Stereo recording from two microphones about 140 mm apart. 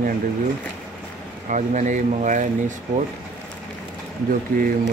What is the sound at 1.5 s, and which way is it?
Speech, 60° right (ahead or behind).